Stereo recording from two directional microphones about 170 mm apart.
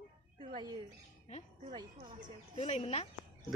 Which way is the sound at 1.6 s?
30° right (ahead or behind).